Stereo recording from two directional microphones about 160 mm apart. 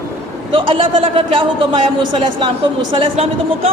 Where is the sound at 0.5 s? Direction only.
35° right (ahead or behind).